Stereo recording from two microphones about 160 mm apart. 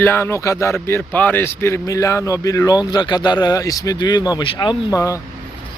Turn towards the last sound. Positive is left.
turn(degrees=20)  # may be behind; listen again after turning